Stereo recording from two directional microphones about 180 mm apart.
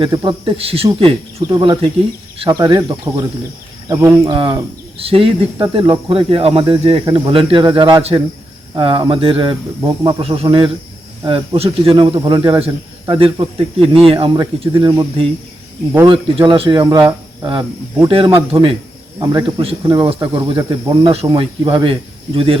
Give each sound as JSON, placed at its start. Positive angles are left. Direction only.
{"t": 0.2, "sound": "speech", "side_deg": -30}
{"t": 4.9, "sound": "speech", "side_deg": -30}